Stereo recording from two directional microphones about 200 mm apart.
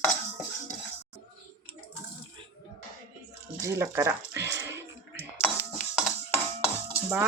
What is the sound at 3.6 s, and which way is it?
Speech, 15° right (ahead or behind).